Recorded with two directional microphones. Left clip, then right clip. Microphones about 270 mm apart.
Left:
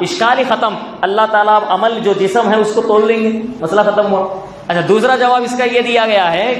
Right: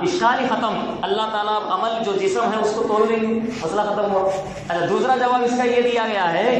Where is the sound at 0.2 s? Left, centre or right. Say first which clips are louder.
Left 9 dB; left.